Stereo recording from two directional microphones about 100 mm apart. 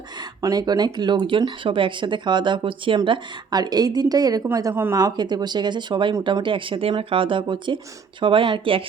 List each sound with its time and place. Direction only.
0.4 s speech: 40° right (ahead or behind)
4.7 s a woman's voice: 20° right (ahead or behind)
4.9 s speech: 40° right (ahead or behind); by 8.8 s 60° right (ahead or behind)